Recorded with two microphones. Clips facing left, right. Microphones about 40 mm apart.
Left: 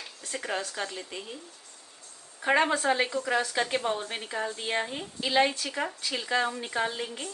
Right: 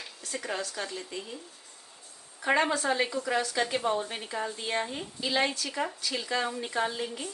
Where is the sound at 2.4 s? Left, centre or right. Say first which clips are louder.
Left 2 dB; left.